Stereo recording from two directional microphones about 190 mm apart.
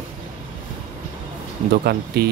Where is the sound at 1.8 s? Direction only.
55° right (ahead or behind).